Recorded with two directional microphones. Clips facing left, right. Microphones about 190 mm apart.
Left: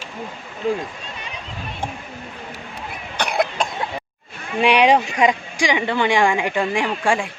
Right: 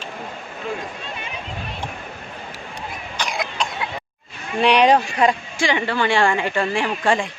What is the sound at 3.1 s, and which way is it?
Cough, 60° left (ahead or behind).